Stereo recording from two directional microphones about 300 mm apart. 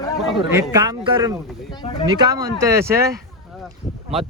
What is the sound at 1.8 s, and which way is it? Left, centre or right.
Speech, centre.